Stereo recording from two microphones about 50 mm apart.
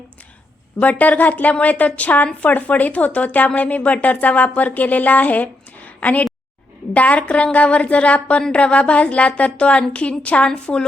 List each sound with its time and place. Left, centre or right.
0.8 s a woman's voice: left